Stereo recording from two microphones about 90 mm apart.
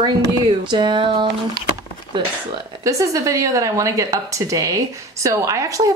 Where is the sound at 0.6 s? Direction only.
60° right (ahead or behind).